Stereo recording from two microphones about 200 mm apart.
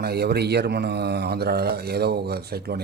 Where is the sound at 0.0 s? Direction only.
55° right (ahead or behind).